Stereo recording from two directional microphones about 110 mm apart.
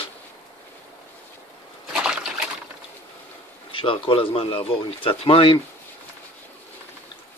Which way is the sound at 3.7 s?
55° left (ahead or behind).